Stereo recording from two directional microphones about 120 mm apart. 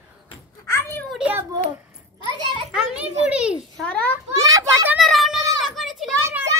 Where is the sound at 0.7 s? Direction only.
20° left (ahead or behind).